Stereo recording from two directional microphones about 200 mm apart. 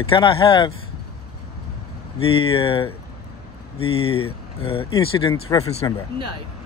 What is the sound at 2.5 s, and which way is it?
Speech, 25° left (ahead or behind).